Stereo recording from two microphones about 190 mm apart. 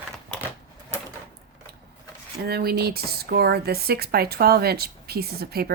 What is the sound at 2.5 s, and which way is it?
Speech, 55° right (ahead or behind).